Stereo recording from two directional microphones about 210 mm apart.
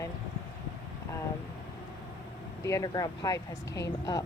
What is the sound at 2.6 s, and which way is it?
Speech, 15° left (ahead or behind).